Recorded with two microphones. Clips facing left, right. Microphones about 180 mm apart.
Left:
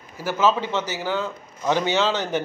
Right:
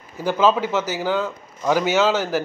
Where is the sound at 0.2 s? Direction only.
15° right (ahead or behind).